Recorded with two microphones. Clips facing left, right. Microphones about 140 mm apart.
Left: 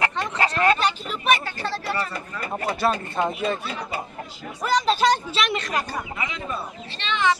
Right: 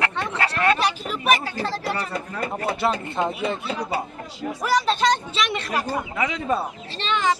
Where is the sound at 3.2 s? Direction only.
20° right (ahead or behind).